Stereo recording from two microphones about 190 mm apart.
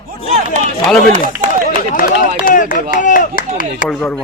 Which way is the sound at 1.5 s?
45° left (ahead or behind).